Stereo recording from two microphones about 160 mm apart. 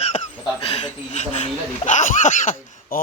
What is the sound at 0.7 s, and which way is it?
Speech, 45° left (ahead or behind).